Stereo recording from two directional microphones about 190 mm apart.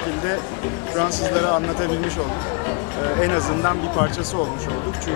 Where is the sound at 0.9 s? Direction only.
20° left (ahead or behind).